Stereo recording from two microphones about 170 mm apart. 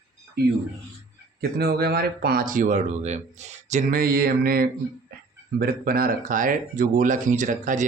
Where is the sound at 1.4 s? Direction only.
70° right (ahead or behind).